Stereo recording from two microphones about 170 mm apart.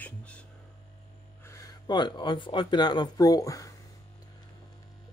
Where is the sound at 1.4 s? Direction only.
20° left (ahead or behind).